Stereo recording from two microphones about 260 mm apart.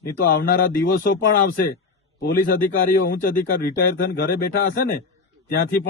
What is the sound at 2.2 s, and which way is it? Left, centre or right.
Speech, left.